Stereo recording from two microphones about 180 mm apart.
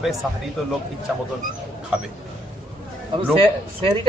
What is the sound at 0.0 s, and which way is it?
Speech, centre (ahead or behind).